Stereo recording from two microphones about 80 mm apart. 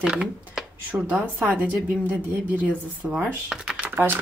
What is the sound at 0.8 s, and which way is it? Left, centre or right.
A woman's voice, centre.